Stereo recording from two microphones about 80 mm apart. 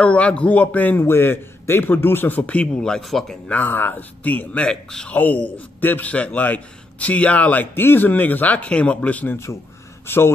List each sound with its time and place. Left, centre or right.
0.0 s a man's voice: centre
3.4 s a man's voice: left